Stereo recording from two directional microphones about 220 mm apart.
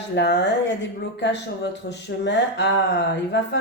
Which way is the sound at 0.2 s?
50° left (ahead or behind).